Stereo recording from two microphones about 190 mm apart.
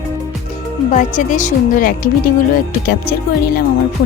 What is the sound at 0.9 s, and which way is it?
Speech, 45° left (ahead or behind).